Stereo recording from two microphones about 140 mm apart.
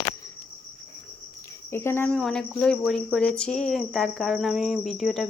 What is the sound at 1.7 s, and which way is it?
Cricket, 15° left (ahead or behind).